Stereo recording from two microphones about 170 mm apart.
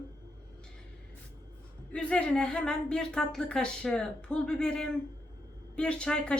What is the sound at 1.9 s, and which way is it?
A woman's voice, 5° left (ahead or behind).